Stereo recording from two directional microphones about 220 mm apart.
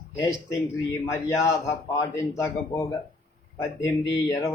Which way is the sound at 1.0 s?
15° left (ahead or behind).